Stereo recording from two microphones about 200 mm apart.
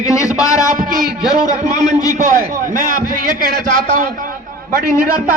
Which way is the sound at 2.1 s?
40° right (ahead or behind).